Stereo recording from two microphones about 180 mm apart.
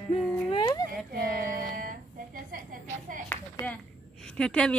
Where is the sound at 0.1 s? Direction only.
25° left (ahead or behind).